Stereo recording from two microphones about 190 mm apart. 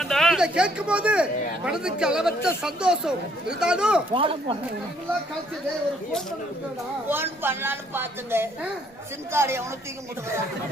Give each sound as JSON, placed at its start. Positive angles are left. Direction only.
{"t": 0.0, "sound": "speech", "side_deg": 0}
{"t": 4.1, "sound": "speech", "side_deg": -25}
{"t": 7.1, "sound": "a woman's voice", "side_deg": -10}